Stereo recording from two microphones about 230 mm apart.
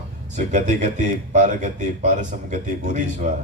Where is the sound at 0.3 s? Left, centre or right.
Right.